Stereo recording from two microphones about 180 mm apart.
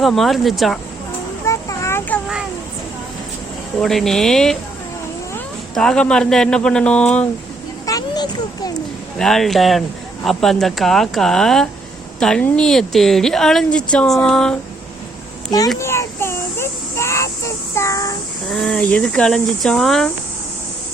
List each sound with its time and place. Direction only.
0.0 s a woman's voice: centre (ahead or behind)
1.5 s a sound: 15° left (ahead or behind)
2.2 s a sound: 5° right (ahead or behind)
3.8 s a woman's voice: centre (ahead or behind)
5.7 s a woman's voice: 5° left (ahead or behind)
7.9 s a sound: 20° left (ahead or behind)
9.1 s a woman's voice: 5° left (ahead or behind)
15.8 s child singing: 15° left (ahead or behind)
18.4 s a woman's voice: 5° left (ahead or behind)